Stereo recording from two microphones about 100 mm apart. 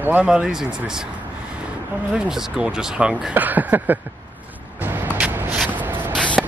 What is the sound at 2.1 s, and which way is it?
Speech, 5° right (ahead or behind).